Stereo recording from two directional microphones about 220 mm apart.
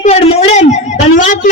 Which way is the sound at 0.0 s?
30° left (ahead or behind).